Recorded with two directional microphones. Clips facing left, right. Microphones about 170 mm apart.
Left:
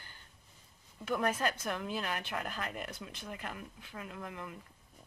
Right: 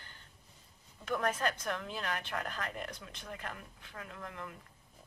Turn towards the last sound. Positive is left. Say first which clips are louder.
# left 2 dB
turn(degrees=10)  # may be behind; listen again after turning